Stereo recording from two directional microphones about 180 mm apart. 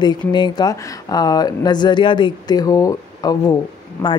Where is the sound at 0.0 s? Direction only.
25° left (ahead or behind).